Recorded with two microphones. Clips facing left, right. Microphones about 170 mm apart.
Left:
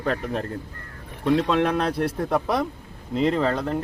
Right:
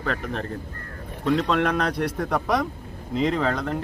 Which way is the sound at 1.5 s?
5° left (ahead or behind).